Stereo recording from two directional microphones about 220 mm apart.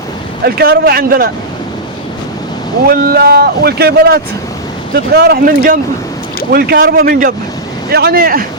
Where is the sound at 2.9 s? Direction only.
45° right (ahead or behind).